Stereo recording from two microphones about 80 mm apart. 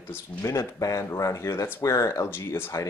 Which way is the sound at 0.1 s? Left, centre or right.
Left.